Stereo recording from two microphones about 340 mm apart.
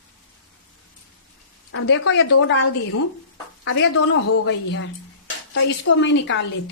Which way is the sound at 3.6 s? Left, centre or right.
Left.